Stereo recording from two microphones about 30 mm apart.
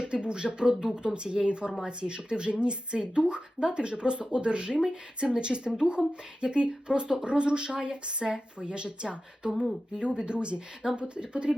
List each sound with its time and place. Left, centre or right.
0.0 s speech: right